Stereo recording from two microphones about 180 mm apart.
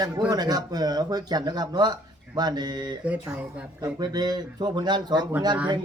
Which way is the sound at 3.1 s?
5° right (ahead or behind).